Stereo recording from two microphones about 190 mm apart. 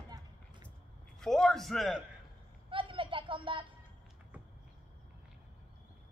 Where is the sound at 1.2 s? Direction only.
Centre (ahead or behind).